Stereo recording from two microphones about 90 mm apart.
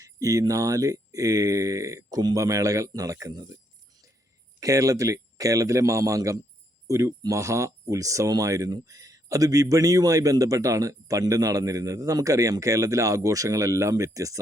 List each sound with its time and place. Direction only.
0.0 s speech: 40° right (ahead or behind)
4.6 s speech: 35° right (ahead or behind)